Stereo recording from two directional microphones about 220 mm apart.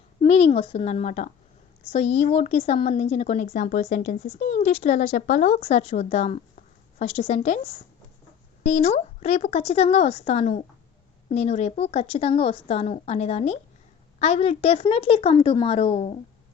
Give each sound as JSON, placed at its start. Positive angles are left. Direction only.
{"t": 0.2, "sound": "a woman's voice", "side_deg": 30}